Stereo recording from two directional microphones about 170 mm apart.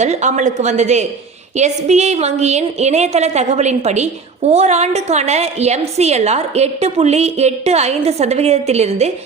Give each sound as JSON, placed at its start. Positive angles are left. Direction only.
{"t": 0.0, "sound": "a woman's voice", "side_deg": -40}